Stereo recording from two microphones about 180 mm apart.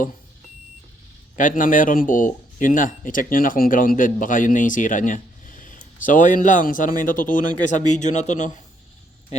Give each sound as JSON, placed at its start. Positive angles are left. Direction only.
{"t": 1.4, "sound": "a man's voice", "side_deg": 45}